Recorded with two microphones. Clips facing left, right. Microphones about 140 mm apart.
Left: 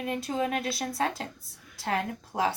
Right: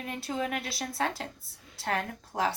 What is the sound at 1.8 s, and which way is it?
Speech, 15° left (ahead or behind).